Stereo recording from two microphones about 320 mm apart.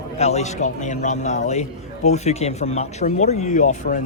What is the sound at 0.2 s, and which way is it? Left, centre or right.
Speech, left.